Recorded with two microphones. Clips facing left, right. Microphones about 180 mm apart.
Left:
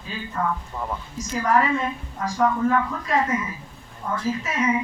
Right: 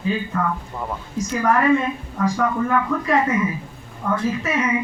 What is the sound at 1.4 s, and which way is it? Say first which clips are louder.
A woman's voice: right 4 dB; 60° right (ahead or behind).